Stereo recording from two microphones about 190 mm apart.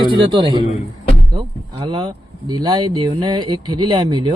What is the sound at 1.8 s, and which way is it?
Speech, 25° right (ahead or behind).